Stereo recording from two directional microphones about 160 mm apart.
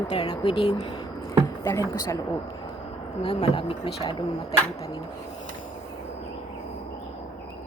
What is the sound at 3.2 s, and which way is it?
Speech, 40° left (ahead or behind).